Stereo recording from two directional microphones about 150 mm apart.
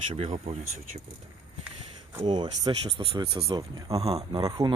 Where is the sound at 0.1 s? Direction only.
40° right (ahead or behind).